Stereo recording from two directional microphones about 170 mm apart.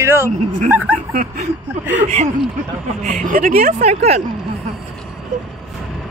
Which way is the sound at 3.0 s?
50° right (ahead or behind).